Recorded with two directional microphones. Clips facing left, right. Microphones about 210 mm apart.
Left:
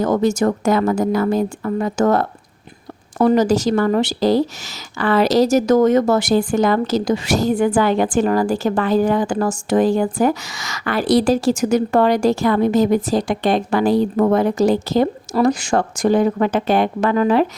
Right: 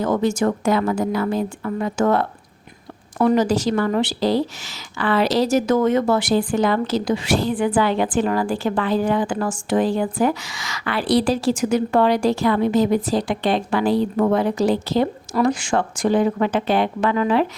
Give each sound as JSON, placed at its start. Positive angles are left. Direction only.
{"t": 0.0, "sound": "a woman's voice", "side_deg": 40}